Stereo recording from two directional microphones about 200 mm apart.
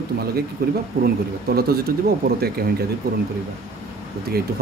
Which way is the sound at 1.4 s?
50° right (ahead or behind).